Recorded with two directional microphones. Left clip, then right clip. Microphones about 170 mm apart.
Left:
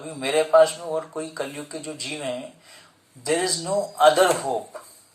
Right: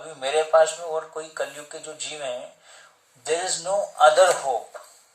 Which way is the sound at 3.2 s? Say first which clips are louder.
Left 1 dB; 20° left (ahead or behind).